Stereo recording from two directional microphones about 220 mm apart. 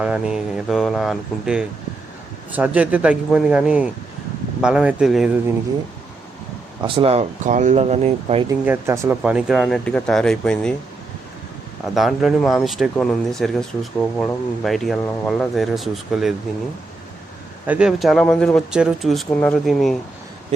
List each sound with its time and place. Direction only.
0.0 s a man's voice: 5° right (ahead or behind)
6.8 s speech: 25° right (ahead or behind)
8.4 s speech: 10° right (ahead or behind)
11.9 s speech: centre (ahead or behind)
17.7 s speech: 5° right (ahead or behind)